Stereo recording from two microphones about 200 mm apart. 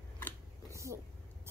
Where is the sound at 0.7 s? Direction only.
15° right (ahead or behind).